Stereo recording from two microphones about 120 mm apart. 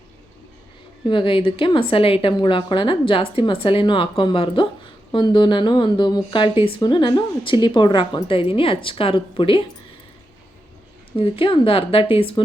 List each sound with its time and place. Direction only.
1.0 s speech: 45° left (ahead or behind)
11.2 s speech: 50° left (ahead or behind)